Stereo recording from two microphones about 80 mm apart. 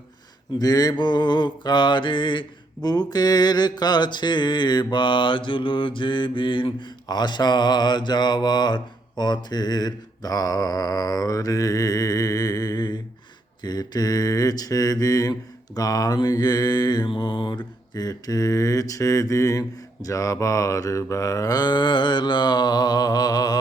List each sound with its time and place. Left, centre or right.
0.6 s mantra: left